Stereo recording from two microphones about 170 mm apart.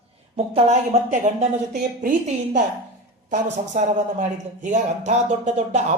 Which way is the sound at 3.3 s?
45° right (ahead or behind).